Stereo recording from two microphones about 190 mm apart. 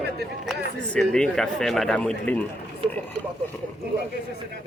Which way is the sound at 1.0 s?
5° left (ahead or behind).